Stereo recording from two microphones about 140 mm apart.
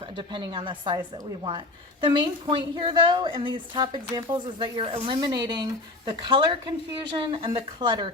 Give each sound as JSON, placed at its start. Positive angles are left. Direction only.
{"t": 0.0, "sound": "a woman's voice", "side_deg": -35}